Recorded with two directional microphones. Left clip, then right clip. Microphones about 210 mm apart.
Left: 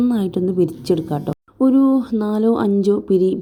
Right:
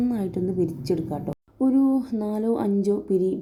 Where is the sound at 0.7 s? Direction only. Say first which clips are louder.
Left 7 dB; 30° left (ahead or behind).